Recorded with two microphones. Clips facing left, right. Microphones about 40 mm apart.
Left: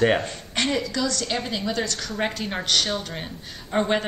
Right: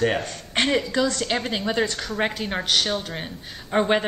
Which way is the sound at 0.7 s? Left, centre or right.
Right.